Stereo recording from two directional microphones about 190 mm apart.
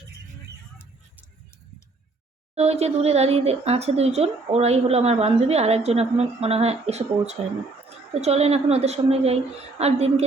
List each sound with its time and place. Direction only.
2.6 s speech: 35° right (ahead or behind)